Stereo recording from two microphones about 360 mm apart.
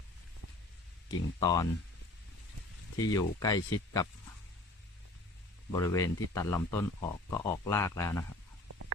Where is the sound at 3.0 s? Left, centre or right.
Centre.